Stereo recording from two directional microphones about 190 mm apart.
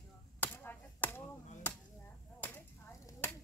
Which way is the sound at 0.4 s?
10° left (ahead or behind).